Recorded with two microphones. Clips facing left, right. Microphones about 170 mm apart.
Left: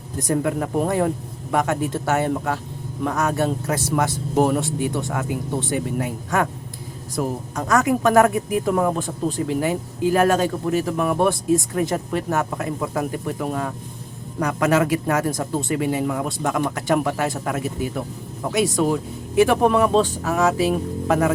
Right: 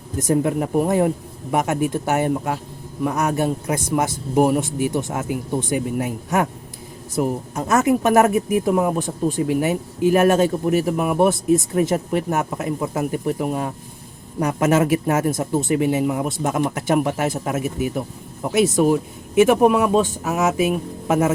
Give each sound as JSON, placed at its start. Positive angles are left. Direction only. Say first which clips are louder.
{"t": 0.2, "sound": "speech", "louder": "right 3 dB", "side_deg": -25}